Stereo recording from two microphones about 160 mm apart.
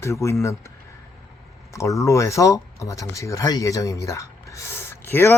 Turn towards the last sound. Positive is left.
turn(degrees=15)  # may be behind; listen again after turning